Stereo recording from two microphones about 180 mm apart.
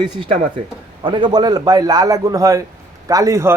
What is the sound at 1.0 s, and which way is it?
A man's voice, 25° right (ahead or behind).